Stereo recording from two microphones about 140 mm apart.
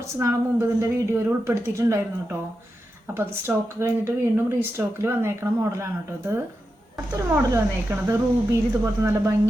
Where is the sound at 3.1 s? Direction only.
15° right (ahead or behind).